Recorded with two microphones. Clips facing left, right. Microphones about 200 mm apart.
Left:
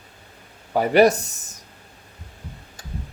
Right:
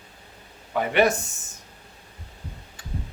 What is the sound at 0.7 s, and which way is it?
Speech, 40° left (ahead or behind).